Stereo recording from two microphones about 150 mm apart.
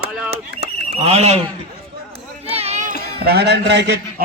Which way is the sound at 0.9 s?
45° right (ahead or behind).